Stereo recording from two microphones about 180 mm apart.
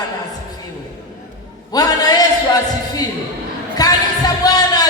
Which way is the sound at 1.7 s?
20° left (ahead or behind).